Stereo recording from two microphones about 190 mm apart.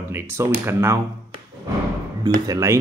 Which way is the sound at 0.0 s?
10° right (ahead or behind).